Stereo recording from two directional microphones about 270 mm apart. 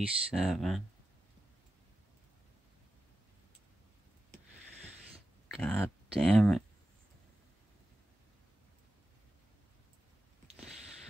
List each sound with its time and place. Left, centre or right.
0.0 s speech: centre
5.5 s speech: centre